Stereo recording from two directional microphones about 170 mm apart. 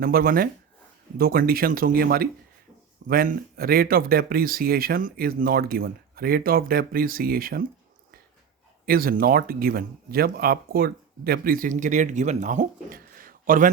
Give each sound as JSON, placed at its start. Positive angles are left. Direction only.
{"t": 0.0, "sound": "speech", "side_deg": -55}
{"t": 8.9, "sound": "speech", "side_deg": -60}